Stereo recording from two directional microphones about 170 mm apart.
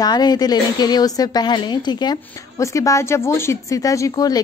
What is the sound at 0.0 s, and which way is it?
A woman's voice, 25° left (ahead or behind).